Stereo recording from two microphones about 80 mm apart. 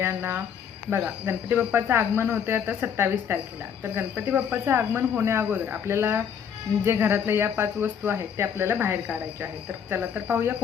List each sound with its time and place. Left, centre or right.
0.0 s speech: right